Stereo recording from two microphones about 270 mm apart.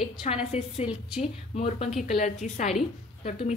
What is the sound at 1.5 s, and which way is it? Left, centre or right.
A woman's voice, left.